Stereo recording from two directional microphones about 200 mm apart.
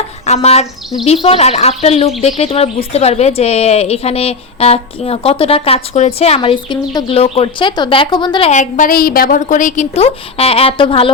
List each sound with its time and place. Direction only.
0.3 s a woman's voice: 30° left (ahead or behind)